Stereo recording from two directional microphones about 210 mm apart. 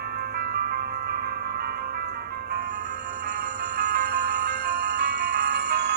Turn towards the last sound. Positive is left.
turn(degrees=-50)  # may be behind; listen again after turning